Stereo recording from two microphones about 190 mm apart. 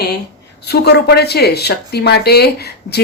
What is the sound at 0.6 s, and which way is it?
Speech, 60° left (ahead or behind).